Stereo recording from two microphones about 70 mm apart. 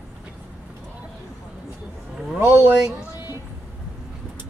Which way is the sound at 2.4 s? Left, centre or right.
Right.